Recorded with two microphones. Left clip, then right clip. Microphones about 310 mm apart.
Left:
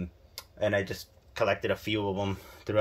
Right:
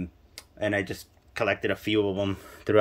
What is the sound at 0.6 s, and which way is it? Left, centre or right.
Speech, centre.